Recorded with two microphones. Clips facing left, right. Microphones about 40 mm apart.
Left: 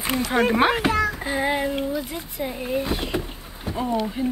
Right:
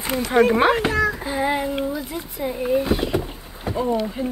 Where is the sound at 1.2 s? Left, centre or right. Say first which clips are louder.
Right 1 dB; left.